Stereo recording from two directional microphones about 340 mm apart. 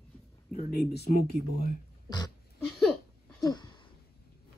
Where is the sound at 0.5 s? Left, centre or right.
Left.